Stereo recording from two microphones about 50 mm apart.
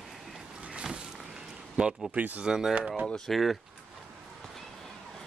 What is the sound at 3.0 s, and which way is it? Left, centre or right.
Speech, centre.